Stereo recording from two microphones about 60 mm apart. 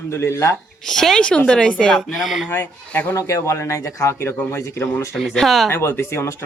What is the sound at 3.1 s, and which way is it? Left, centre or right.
Speech, left.